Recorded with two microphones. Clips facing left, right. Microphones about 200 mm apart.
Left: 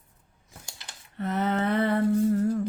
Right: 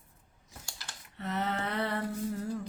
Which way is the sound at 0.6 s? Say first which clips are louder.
Even; 20° left (ahead or behind).